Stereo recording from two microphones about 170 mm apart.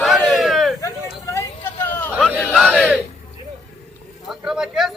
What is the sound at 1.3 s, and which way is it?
Vehicle, 15° left (ahead or behind).